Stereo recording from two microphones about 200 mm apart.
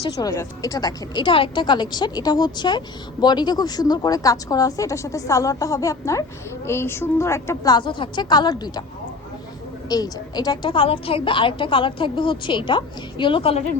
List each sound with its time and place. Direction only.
0.0 s a woman's voice: 15° left (ahead or behind)
9.9 s a woman's voice: 20° left (ahead or behind)